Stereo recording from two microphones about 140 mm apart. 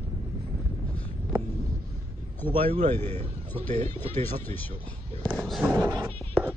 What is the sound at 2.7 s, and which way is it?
Speech, 45° right (ahead or behind).